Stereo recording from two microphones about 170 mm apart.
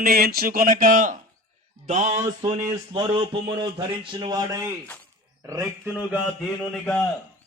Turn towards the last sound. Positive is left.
turn(degrees=5)  # may be behind; listen again after turning